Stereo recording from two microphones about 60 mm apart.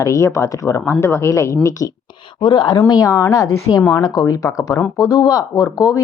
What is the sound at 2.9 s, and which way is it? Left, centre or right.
Speech, left.